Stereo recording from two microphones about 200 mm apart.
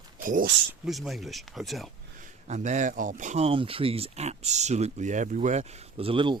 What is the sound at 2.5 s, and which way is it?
Speech, 35° right (ahead or behind).